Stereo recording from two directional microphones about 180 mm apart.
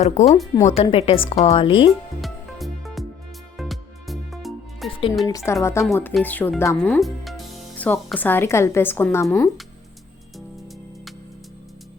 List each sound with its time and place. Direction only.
0.0 s a woman's voice: 40° left (ahead or behind)
2.2 s music: centre (ahead or behind)
4.9 s music: 30° left (ahead or behind)
5.2 s a woman's voice: 15° left (ahead or behind)
7.0 s speech: centre (ahead or behind)